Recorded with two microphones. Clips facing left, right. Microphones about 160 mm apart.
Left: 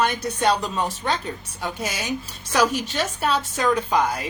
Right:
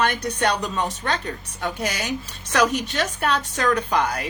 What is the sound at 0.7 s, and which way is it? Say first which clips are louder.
Speech: even; 10° left (ahead or behind).